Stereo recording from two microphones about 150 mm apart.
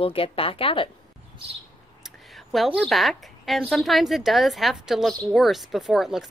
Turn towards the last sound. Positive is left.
turn(degrees=-5)  # may be behind; listen again after turning